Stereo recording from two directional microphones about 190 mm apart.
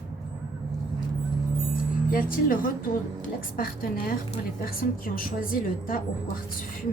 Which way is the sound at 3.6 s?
50° left (ahead or behind).